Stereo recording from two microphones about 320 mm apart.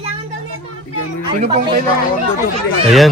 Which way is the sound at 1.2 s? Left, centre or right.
Centre.